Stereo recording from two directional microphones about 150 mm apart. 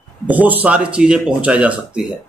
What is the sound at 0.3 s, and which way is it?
Speech, 10° right (ahead or behind).